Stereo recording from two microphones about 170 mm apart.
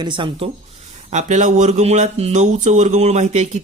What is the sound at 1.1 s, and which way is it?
Speech, 45° right (ahead or behind).